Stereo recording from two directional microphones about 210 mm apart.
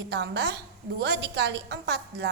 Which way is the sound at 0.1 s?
55° right (ahead or behind).